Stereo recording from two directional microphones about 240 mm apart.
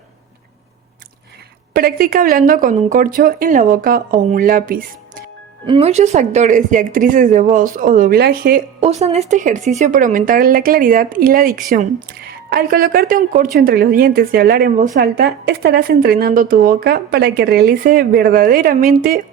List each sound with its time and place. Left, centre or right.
1.7 s speech: right
5.6 s speech: right
8.8 s speech: right